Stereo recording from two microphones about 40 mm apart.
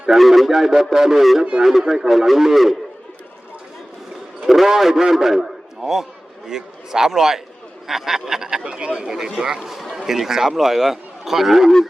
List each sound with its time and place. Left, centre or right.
0.1 s a man's voice: centre
1.5 s a man's voice: right
1.9 s a man's voice: centre
4.4 s a man's voice: centre
8.6 s speech: right
10.1 s a man's voice: centre